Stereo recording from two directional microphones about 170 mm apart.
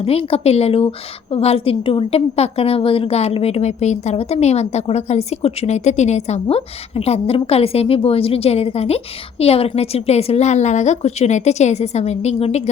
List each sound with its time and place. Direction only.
0.0 s a woman's voice: 35° left (ahead or behind)